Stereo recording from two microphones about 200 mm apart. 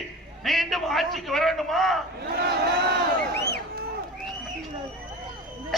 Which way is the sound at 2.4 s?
55° right (ahead or behind).